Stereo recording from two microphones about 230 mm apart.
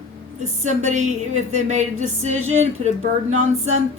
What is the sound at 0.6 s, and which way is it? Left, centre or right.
A woman's voice, right.